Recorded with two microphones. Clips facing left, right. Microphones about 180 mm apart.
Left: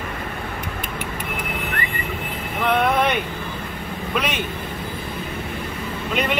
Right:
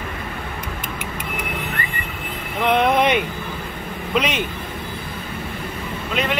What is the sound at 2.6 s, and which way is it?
Vehicle, 15° right (ahead or behind).